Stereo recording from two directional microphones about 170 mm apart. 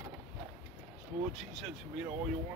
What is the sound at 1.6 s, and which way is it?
Speech, 5° right (ahead or behind).